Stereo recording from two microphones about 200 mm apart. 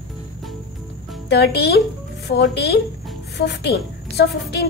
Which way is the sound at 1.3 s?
55° left (ahead or behind).